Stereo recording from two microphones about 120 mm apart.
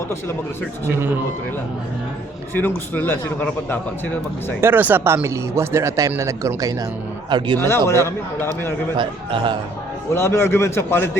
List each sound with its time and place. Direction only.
0.9 s a man's voice: 15° right (ahead or behind)
2.6 s a man's voice: 15° left (ahead or behind)
4.6 s speech: 15° right (ahead or behind)
7.3 s speech: 40° right (ahead or behind)
7.9 s a man's voice: 25° left (ahead or behind)
9.0 s speech: 45° right (ahead or behind)
10.2 s a man's voice: 20° left (ahead or behind)